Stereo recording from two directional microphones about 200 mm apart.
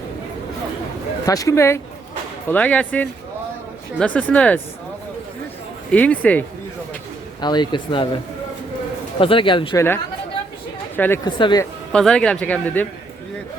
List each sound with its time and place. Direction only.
1.2 s speech: 15° left (ahead or behind)
5.9 s speech: 5° left (ahead or behind)
7.4 s speech: 20° left (ahead or behind)
10.9 s speech: 10° left (ahead or behind)
11.3 s speech: 25° left (ahead or behind)
11.6 s a man's voice: 5° left (ahead or behind)